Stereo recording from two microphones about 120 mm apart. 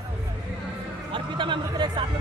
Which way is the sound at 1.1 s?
45° right (ahead or behind).